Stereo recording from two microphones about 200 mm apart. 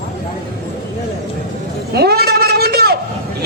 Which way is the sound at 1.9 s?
50° right (ahead or behind).